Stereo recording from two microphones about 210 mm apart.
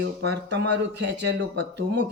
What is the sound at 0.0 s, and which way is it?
Speech, 60° right (ahead or behind).